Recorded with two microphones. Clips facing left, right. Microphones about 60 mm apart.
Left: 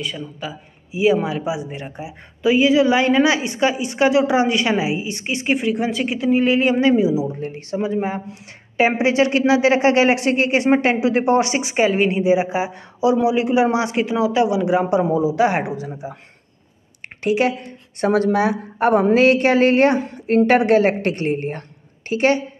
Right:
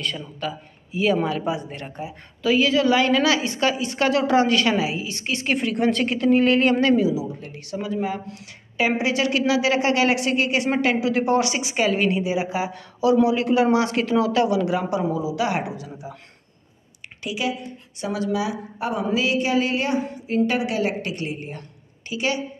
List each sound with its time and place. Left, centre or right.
0.0 s a man's voice: centre
5.6 s speech: centre; by 16.2 s left
17.2 s a woman's voice: left